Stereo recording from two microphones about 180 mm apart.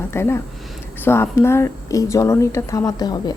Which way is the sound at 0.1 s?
15° left (ahead or behind).